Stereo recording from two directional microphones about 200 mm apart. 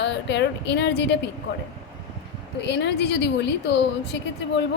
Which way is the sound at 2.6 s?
60° left (ahead or behind).